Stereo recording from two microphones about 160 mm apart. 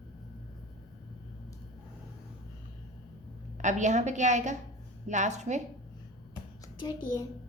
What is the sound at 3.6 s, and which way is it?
A woman's voice, 50° right (ahead or behind).